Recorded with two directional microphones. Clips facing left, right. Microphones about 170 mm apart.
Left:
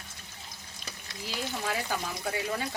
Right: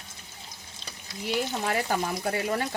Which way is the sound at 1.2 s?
60° right (ahead or behind).